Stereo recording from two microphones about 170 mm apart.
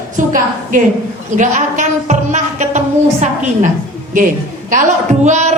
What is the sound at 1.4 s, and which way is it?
A man's voice, 45° right (ahead or behind).